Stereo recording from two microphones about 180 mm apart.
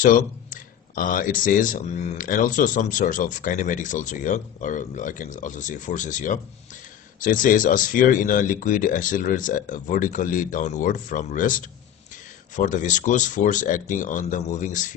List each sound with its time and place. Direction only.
0.0 s speech: 50° left (ahead or behind)